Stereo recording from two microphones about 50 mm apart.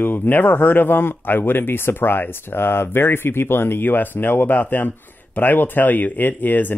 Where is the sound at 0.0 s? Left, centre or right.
Left.